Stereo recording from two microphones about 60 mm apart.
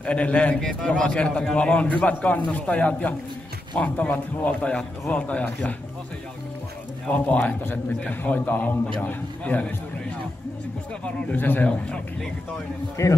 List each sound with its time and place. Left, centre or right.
0.0 s a man's voice: centre
7.1 s a man's voice: left
11.3 s a man's voice: left
13.0 s speech: left